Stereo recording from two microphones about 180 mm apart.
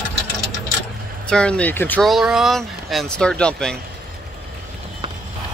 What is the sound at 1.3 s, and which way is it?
Speech, 5° left (ahead or behind).